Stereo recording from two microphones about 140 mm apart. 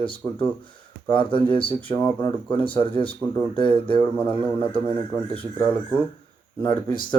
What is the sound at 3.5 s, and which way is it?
Speech, 35° left (ahead or behind).